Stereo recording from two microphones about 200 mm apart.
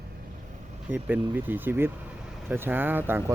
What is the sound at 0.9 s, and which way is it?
Speech, 10° right (ahead or behind).